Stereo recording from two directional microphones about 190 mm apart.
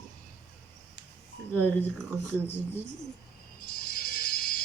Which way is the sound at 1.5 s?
10° left (ahead or behind).